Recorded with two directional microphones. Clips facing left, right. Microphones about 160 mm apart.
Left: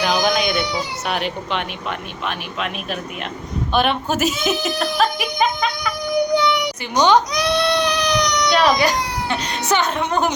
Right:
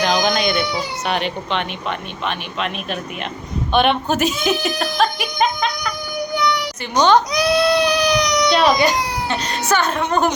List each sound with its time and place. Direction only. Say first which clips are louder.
0.0 s speech: right 1 dB; 5° left (ahead or behind)
6.3 s child singing: right 1 dB; 30° left (ahead or behind)
6.9 s a woman's voice: right 1 dB; 15° left (ahead or behind)
7.3 s speech: right 3 dB; 5° right (ahead or behind)
9.3 s a woman's voice: even; 15° left (ahead or behind)